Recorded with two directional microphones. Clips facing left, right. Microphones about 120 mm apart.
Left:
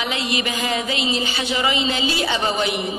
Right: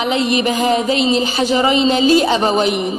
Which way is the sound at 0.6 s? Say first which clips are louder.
Right 8 dB; 35° right (ahead or behind).